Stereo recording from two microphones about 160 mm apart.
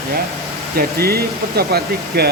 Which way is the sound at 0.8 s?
75° right (ahead or behind).